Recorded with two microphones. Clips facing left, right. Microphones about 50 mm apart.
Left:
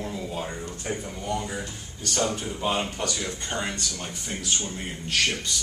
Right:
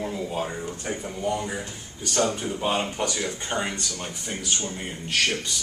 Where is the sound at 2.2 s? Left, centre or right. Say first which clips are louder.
Right 2 dB; right.